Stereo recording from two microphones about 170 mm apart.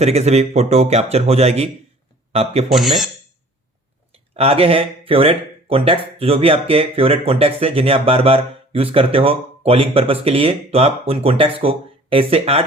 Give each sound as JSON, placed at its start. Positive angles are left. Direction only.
{"t": 0.0, "sound": "speech", "side_deg": -40}
{"t": 2.6, "sound": "speech", "side_deg": 0}
{"t": 4.1, "sound": "speech", "side_deg": -35}